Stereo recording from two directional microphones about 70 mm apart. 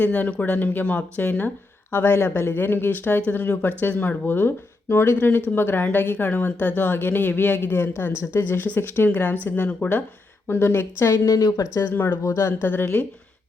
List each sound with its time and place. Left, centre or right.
0.0 s speech: left
11.9 s speech: left
12.2 s speech: left
12.6 s speech: left